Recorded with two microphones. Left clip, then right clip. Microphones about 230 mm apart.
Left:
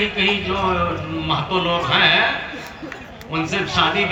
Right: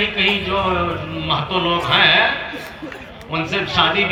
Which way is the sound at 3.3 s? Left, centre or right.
Centre.